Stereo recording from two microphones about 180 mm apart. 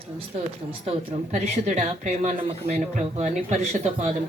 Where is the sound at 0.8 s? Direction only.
40° right (ahead or behind).